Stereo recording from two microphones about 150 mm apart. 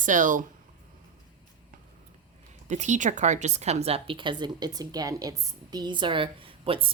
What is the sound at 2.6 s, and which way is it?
Speech, 50° right (ahead or behind).